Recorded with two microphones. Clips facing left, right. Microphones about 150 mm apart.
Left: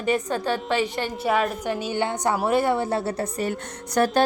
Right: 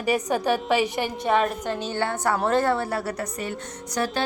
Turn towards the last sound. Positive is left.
turn(degrees=50)  # may be behind; listen again after turning